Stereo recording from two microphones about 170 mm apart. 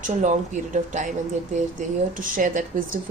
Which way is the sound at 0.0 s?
45° right (ahead or behind).